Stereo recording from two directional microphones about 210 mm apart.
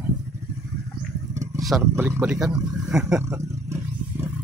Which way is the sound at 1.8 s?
10° right (ahead or behind).